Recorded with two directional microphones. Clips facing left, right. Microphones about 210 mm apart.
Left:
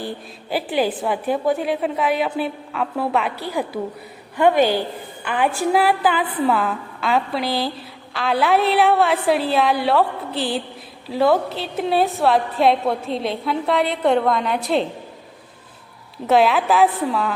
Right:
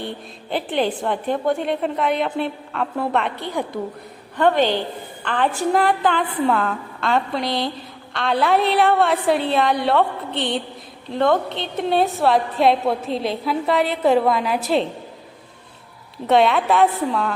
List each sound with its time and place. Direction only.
0.0 s a woman's voice: 5° left (ahead or behind)
16.1 s a woman's voice: centre (ahead or behind)